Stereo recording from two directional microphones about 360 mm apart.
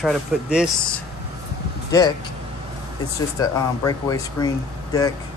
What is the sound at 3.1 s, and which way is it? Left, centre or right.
Speech, centre.